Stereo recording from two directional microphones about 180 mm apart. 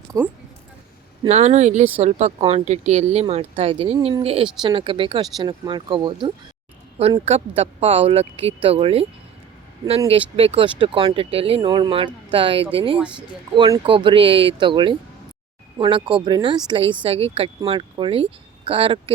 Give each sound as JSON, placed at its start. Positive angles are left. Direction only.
{"t": 0.1, "sound": "speech", "side_deg": -15}
{"t": 1.3, "sound": "speech", "side_deg": -40}
{"t": 10.1, "sound": "speech", "side_deg": -35}
{"t": 13.0, "sound": "speech", "side_deg": -5}
{"t": 13.6, "sound": "speech", "side_deg": -25}